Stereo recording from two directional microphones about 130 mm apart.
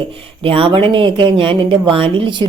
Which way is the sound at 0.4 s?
45° right (ahead or behind).